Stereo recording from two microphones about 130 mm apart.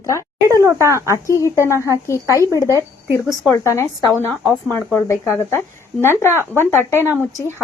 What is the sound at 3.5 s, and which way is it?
Speech, 20° left (ahead or behind).